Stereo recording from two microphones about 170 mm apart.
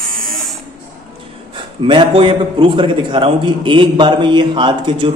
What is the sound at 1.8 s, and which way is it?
A man's voice, 30° right (ahead or behind).